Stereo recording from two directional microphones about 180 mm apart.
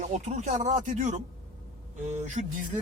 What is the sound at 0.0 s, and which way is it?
Speech, 40° right (ahead or behind).